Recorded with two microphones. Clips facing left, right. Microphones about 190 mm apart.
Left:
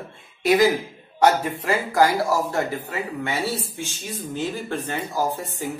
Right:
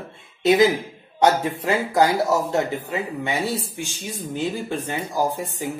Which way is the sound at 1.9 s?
20° right (ahead or behind).